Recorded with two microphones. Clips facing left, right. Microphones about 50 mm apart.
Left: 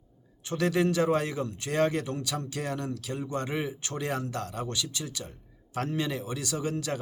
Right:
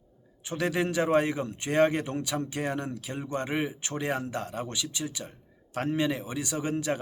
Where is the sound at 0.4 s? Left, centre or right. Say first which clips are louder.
Left 2 dB; centre.